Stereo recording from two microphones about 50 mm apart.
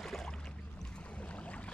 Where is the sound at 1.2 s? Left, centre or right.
Left.